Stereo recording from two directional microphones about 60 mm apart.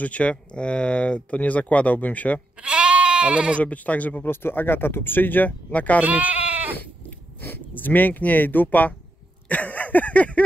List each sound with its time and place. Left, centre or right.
0.0 s speech: left
2.6 s goat: centre
3.6 s speech: left
4.3 s speech: left
5.9 s speech: right
7.4 s speech: left
9.5 s a sound: left